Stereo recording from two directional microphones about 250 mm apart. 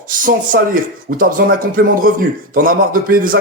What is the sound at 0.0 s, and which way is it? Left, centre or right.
Speech, right.